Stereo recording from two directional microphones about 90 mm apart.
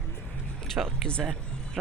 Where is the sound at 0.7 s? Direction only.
5° left (ahead or behind).